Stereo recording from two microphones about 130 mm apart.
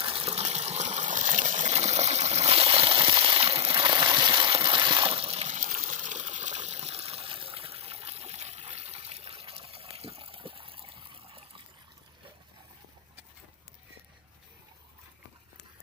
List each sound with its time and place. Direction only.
0.0 s water: 45° right (ahead or behind)